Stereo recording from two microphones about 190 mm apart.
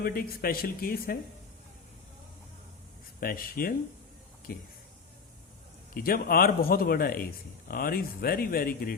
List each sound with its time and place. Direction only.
0.0 s a man's voice: 50° left (ahead or behind)
3.2 s a man's voice: 50° left (ahead or behind)
5.9 s a man's voice: 50° left (ahead or behind)